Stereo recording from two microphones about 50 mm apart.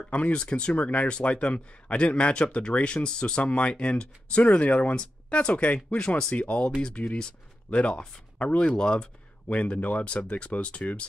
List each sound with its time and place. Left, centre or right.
0.1 s a man's voice: left